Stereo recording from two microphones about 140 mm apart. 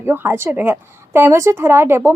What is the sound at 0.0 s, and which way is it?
A woman's voice, 15° right (ahead or behind).